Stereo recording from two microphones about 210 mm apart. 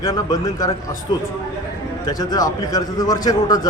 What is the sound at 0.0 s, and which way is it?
Speech, 15° left (ahead or behind).